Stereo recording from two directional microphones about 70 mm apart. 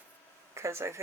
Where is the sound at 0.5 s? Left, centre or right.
Right.